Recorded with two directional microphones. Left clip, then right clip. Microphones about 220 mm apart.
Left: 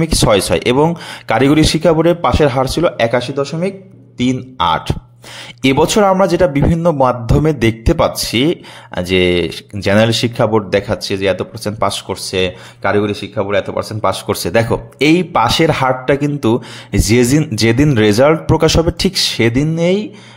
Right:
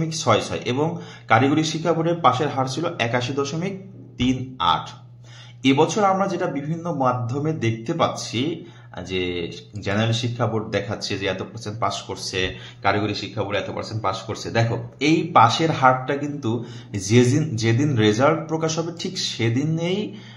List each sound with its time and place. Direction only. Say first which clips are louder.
0.0 s speech: left 8 dB; 45° left (ahead or behind)
4.2 s a man's voice: left 7 dB; 40° left (ahead or behind)